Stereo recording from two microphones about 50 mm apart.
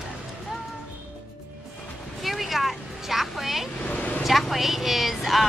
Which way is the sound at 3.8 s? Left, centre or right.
Left.